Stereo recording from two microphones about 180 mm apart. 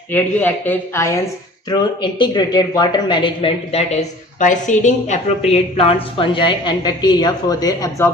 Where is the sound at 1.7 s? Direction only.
25° left (ahead or behind).